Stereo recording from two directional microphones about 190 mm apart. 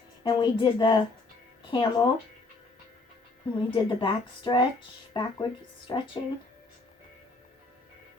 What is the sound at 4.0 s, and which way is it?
Speech, 25° left (ahead or behind).